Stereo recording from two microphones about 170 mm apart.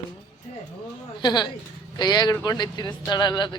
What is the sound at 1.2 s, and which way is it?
Speech, 25° left (ahead or behind).